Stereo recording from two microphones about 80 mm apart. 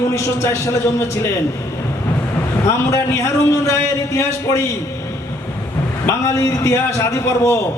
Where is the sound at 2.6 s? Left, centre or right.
Left.